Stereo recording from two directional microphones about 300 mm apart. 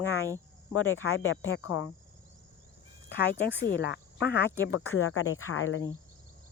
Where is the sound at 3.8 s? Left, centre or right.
Left.